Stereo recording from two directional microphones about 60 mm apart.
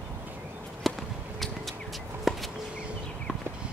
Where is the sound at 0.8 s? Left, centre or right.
Centre.